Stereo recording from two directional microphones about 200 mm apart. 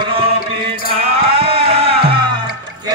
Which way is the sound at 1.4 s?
30° right (ahead or behind).